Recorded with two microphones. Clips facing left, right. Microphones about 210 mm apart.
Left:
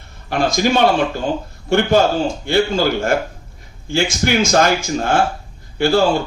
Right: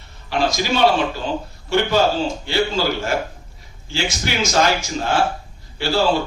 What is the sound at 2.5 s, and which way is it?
A man's voice, 50° left (ahead or behind).